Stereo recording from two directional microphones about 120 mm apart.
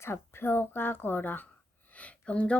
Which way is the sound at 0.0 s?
20° left (ahead or behind).